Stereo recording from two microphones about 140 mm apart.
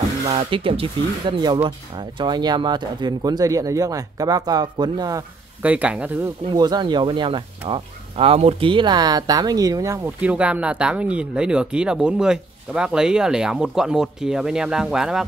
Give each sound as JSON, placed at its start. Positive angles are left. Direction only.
{"t": 0.3, "sound": "speech", "side_deg": -45}
{"t": 5.6, "sound": "speech", "side_deg": -10}
{"t": 6.2, "sound": "speech", "side_deg": -30}
{"t": 10.2, "sound": "speech", "side_deg": -10}